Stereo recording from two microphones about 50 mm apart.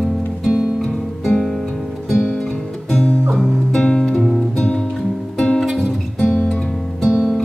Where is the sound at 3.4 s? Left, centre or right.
Centre.